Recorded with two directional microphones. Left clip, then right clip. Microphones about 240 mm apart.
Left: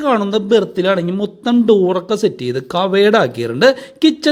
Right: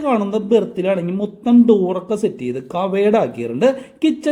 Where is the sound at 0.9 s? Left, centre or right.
Centre.